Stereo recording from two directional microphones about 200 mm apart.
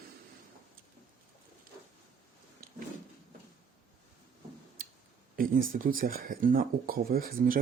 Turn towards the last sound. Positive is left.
turn(degrees=-45)  # may be behind; listen again after turning